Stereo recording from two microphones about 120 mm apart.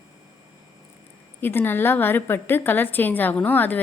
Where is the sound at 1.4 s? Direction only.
15° left (ahead or behind).